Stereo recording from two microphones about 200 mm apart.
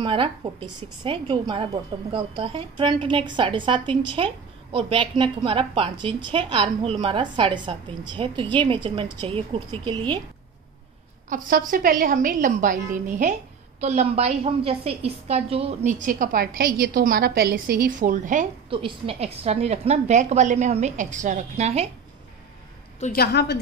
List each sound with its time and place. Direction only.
0.0 s a woman's voice: 25° right (ahead or behind)
11.2 s a woman's voice: 40° right (ahead or behind)
18.7 s a woman's voice: 25° right (ahead or behind)
23.1 s a woman's voice: 55° left (ahead or behind)